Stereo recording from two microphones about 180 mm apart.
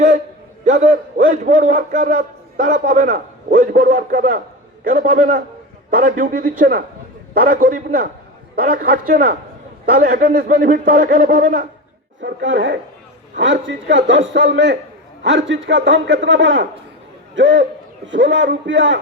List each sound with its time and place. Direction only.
0.6 s a man's voice: 40° right (ahead or behind)
12.2 s a man's voice: 85° right